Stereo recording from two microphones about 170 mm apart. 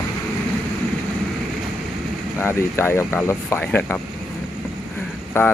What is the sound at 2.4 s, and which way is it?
Speech, 15° left (ahead or behind).